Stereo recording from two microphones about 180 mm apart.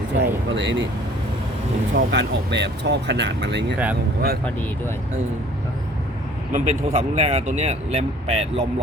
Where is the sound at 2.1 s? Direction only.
75° right (ahead or behind).